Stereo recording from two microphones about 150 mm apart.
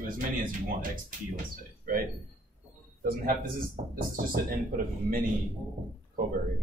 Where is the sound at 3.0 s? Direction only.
75° right (ahead or behind).